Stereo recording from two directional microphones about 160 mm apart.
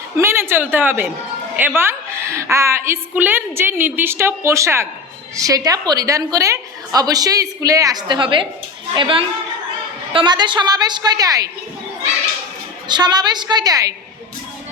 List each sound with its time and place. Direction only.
0.2 s a woman's voice: 15° right (ahead or behind)
12.9 s a woman's voice: 25° right (ahead or behind)